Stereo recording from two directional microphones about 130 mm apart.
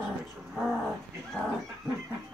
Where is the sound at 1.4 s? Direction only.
10° left (ahead or behind).